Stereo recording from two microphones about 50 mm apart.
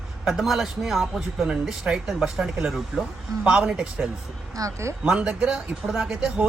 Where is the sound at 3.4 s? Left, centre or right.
Centre.